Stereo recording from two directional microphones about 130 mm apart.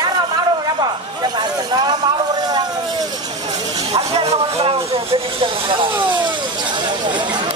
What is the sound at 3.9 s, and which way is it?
Speech, 50° right (ahead or behind).